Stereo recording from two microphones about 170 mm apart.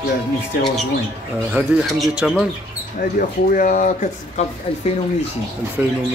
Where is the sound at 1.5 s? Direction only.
5° right (ahead or behind).